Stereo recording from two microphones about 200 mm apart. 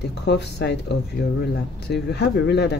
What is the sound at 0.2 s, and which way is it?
Speech, 55° left (ahead or behind).